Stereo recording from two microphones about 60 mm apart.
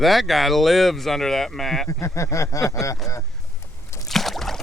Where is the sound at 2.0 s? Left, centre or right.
Left.